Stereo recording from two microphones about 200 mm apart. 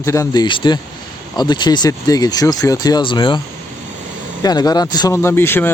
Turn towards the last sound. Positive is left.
turn(degrees=10)  # may be behind; listen again after turning